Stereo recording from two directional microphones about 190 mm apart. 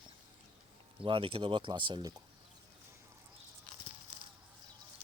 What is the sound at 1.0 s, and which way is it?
Speech, 30° right (ahead or behind).